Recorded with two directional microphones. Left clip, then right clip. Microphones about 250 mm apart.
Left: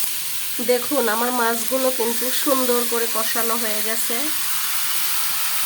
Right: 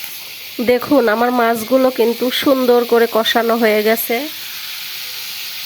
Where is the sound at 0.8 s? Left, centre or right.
Right.